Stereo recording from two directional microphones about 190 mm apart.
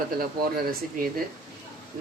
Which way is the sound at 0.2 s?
50° right (ahead or behind).